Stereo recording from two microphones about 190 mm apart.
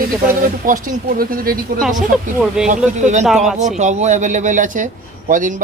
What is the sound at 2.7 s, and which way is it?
Speech, 40° right (ahead or behind).